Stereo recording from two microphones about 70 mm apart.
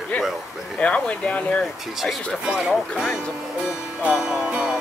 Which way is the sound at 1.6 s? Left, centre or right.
Centre.